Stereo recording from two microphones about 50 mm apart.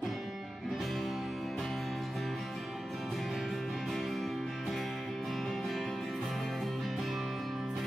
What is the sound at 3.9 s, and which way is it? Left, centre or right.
Music, centre.